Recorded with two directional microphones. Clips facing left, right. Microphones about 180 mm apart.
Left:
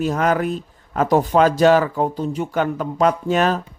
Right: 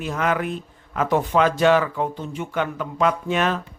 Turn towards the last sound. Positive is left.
turn(degrees=40)  # may be behind; listen again after turning